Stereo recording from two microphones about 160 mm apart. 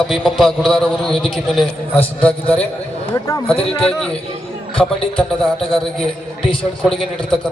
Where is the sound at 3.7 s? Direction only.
5° left (ahead or behind).